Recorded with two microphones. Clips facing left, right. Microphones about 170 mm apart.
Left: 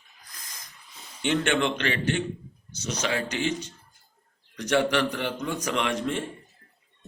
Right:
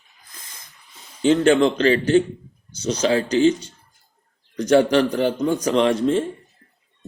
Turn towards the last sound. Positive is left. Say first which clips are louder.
# right 9 dB
turn(degrees=-30)  # may be behind; listen again after turning